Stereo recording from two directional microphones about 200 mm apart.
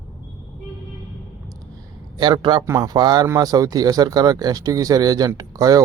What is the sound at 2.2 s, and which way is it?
Speech, 20° right (ahead or behind).